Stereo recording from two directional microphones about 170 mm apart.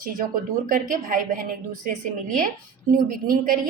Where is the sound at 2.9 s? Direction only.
55° right (ahead or behind).